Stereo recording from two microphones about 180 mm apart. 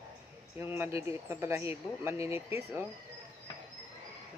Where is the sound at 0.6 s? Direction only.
15° right (ahead or behind).